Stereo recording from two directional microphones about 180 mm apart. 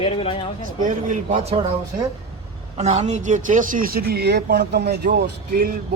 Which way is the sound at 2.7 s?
35° right (ahead or behind).